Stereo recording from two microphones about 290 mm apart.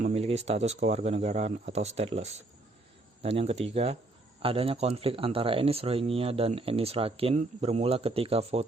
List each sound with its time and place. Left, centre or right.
0.0 s speech: right